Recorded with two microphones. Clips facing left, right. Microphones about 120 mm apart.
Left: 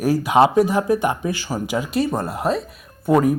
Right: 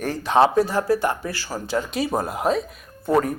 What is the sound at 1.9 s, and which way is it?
Speech, centre (ahead or behind).